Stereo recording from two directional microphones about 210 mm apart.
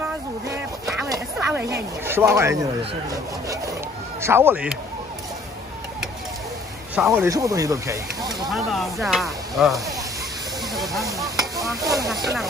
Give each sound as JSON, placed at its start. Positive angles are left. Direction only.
{"t": 1.0, "sound": "speech", "side_deg": -15}
{"t": 4.2, "sound": "speech", "side_deg": -10}
{"t": 7.1, "sound": "speech", "side_deg": -15}
{"t": 8.5, "sound": "speech", "side_deg": 0}
{"t": 10.7, "sound": "hiss", "side_deg": 0}
{"t": 11.2, "sound": "stir", "side_deg": -15}
{"t": 11.6, "sound": "stir", "side_deg": 0}